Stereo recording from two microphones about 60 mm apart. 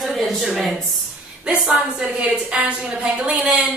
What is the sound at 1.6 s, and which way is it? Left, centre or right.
A woman's voice, centre.